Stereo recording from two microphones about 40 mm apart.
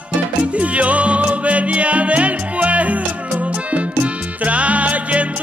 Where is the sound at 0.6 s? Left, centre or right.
Right.